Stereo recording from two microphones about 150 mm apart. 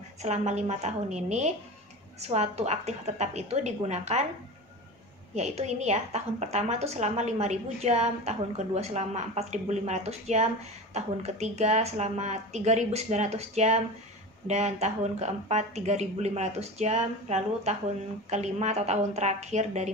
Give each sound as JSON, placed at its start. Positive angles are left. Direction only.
{"t": 0.2, "sound": "a woman's voice", "side_deg": -50}
{"t": 5.3, "sound": "a woman's voice", "side_deg": -50}